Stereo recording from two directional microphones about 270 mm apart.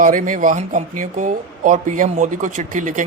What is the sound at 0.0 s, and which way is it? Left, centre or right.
Speech, right.